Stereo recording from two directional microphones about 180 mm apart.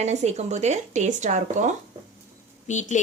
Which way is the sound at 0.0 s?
40° right (ahead or behind).